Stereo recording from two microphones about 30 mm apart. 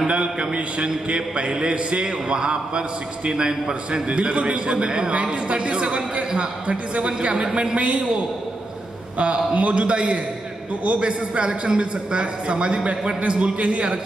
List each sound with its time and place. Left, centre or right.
0.0 s a man's voice: right
4.8 s a man's voice: right
9.2 s a man's voice: right
13.4 s a man's voice: right